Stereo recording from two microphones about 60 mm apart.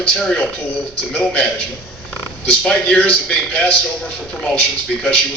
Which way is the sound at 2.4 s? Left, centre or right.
Centre.